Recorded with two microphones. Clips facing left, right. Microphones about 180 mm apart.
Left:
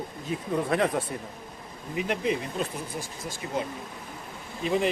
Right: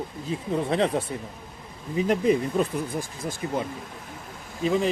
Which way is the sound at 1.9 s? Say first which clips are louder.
Right 6 dB; 45° right (ahead or behind).